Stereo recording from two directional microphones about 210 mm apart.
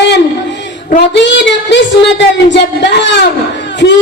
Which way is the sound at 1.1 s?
55° left (ahead or behind).